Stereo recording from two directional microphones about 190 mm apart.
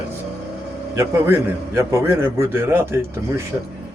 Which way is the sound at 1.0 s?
15° right (ahead or behind).